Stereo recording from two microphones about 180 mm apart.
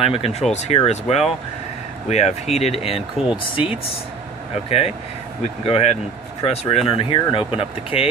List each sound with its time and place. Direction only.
0.0 s speech: 35° left (ahead or behind)